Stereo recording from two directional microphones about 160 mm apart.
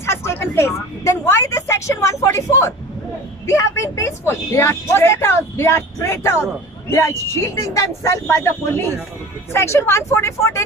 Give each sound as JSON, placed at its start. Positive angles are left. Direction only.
{"t": 0.0, "sound": "speech", "side_deg": 15}